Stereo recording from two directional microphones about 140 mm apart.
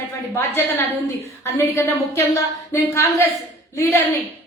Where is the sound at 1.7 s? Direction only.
20° left (ahead or behind).